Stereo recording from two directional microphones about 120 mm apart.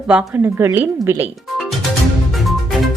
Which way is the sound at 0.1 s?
15° right (ahead or behind).